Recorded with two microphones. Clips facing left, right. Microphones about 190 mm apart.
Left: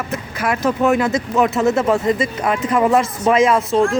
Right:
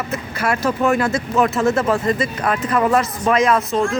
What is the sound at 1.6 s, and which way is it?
Speech, 20° left (ahead or behind).